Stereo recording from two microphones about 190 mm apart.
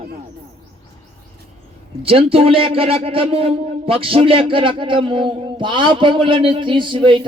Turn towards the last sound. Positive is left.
turn(degrees=-25)  # may be behind; listen again after turning